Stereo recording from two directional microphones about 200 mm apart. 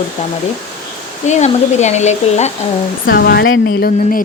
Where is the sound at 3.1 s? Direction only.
50° left (ahead or behind).